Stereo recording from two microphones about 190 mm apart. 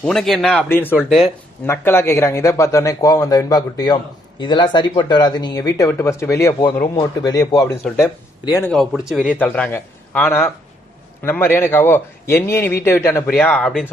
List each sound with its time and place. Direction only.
0.0 s speech: 5° left (ahead or behind)
0.9 s speech: centre (ahead or behind)
1.6 s speech: 10° left (ahead or behind)
8.7 s speech: centre (ahead or behind)
9.4 s speech: 5° left (ahead or behind)